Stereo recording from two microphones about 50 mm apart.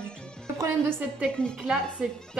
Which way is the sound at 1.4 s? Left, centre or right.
Centre.